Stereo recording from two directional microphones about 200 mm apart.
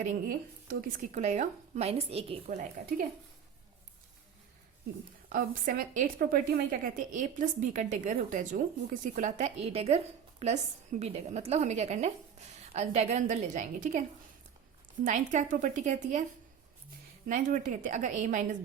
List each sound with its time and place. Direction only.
0.0 s a woman's voice: 35° right (ahead or behind)
5.3 s a woman's voice: 45° right (ahead or behind)
15.0 s a woman's voice: 40° right (ahead or behind)
17.2 s a woman's voice: 40° right (ahead or behind)